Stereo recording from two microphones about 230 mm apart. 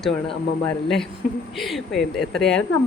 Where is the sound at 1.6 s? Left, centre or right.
Centre.